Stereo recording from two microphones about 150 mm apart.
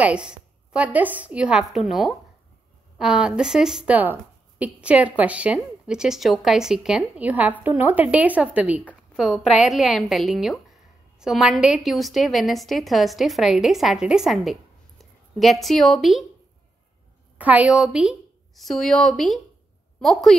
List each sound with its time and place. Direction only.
0.0 s a woman's voice: 5° right (ahead or behind)
17.4 s a woman's voice: 10° right (ahead or behind)